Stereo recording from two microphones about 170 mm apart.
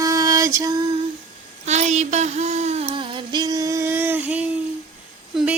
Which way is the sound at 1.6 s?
40° right (ahead or behind).